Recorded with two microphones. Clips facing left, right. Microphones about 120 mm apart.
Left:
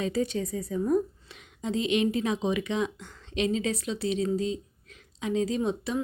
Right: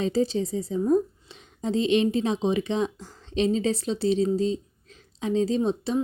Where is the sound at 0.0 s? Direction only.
30° right (ahead or behind).